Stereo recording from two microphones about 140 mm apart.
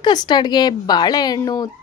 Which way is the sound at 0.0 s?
30° left (ahead or behind).